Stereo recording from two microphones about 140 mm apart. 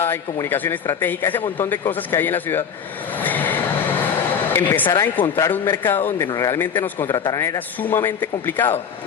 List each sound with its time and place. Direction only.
0.0 s a man's voice: 15° left (ahead or behind)
3.2 s vehicle: 15° left (ahead or behind)
4.5 s a man's voice: 15° left (ahead or behind)